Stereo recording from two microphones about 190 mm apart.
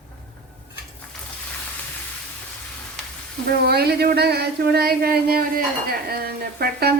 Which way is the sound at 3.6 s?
55° right (ahead or behind).